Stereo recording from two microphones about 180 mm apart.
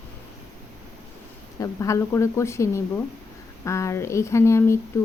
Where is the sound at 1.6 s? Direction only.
15° left (ahead or behind).